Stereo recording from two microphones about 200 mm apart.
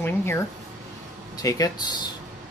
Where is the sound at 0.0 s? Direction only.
10° left (ahead or behind).